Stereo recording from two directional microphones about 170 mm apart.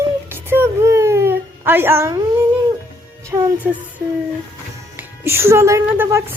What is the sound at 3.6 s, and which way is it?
Speech, 5° right (ahead or behind).